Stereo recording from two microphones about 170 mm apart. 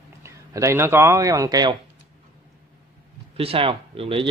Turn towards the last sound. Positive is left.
turn(degrees=-35)  # may be behind; listen again after turning